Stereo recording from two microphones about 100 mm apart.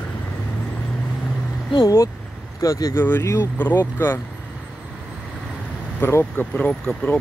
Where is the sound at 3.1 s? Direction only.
25° left (ahead or behind).